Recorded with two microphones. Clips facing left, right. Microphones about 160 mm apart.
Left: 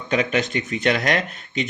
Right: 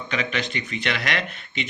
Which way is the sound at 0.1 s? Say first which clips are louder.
Left 7 dB; 45° left (ahead or behind).